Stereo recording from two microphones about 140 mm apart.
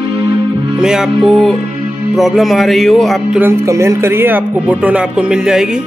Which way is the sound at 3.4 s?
20° right (ahead or behind).